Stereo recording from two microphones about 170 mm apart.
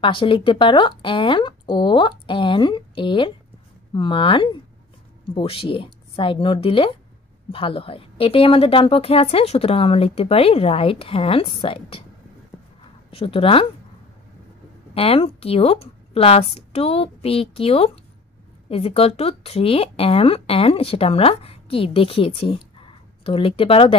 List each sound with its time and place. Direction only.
0.0 s speech: 30° left (ahead or behind)
13.1 s speech: 35° left (ahead or behind)
15.0 s speech: 35° left (ahead or behind)